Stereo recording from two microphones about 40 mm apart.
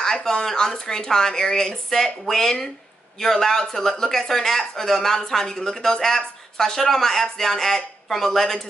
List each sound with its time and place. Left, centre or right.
0.0 s speech: centre